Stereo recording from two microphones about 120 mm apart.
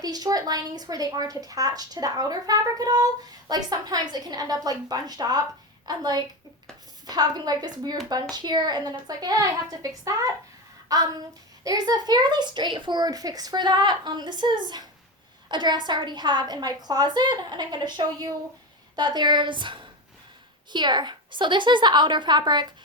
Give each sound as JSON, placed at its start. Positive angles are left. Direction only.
{"t": 0.0, "sound": "speech", "side_deg": -30}
{"t": 10.8, "sound": "a sound", "side_deg": -30}
{"t": 11.6, "sound": "speech", "side_deg": -30}